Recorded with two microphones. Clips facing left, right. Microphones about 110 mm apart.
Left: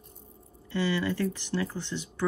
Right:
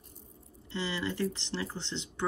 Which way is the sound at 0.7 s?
25° right (ahead or behind).